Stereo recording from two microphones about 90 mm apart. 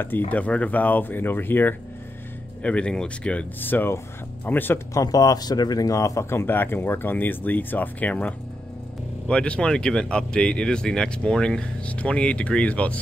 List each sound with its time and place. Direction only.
0.0 s speech: 20° left (ahead or behind)
4.9 s speech: 40° left (ahead or behind)
6.4 s speech: 20° left (ahead or behind)